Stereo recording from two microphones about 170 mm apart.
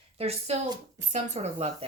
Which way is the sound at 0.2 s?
40° right (ahead or behind).